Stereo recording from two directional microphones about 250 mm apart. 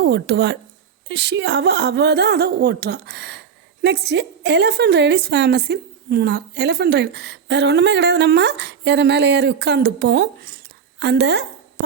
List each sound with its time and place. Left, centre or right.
0.0 s a woman's voice: right